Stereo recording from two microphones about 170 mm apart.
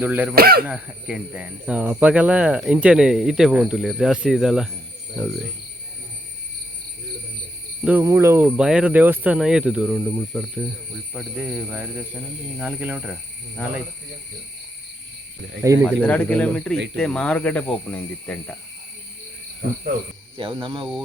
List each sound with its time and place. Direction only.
0.0 s speech: 10° right (ahead or behind)
0.3 s speech: 65° right (ahead or behind)
0.7 s speech: 5° right (ahead or behind)
8.0 s speech: 15° right (ahead or behind)
15.6 s speech: 20° right (ahead or behind)
15.9 s speech: 10° left (ahead or behind)
16.7 s speech: 90° right
17.0 s speech: 5° left (ahead or behind)
20.3 s speech: 30° right (ahead or behind)